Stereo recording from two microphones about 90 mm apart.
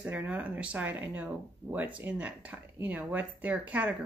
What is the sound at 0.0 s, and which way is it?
Speech, 20° right (ahead or behind).